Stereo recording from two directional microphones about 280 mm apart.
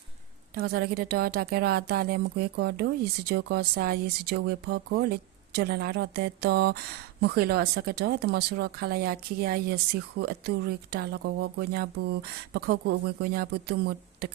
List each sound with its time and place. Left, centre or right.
0.5 s speech: right